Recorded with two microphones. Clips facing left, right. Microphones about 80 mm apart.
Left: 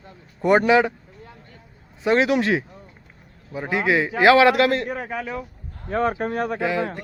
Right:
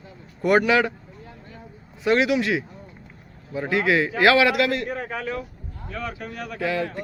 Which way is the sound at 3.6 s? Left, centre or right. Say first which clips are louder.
Even; left.